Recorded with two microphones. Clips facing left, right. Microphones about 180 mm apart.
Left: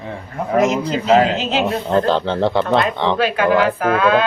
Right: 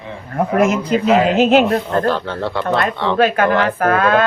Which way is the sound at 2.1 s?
20° left (ahead or behind).